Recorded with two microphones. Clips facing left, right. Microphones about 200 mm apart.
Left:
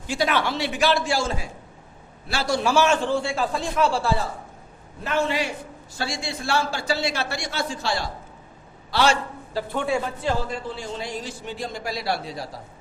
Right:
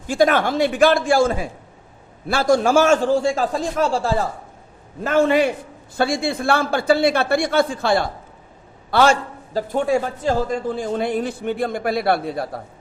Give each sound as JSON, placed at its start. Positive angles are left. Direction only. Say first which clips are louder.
{"t": 0.1, "sound": "a man's voice", "louder": "right 7 dB", "side_deg": -50}